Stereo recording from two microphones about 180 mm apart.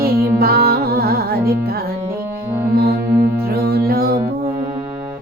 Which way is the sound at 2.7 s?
60° right (ahead or behind).